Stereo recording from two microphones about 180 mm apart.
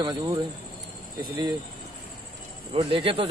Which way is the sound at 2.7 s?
30° right (ahead or behind).